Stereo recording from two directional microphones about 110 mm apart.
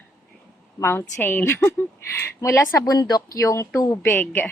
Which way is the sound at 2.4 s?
30° left (ahead or behind).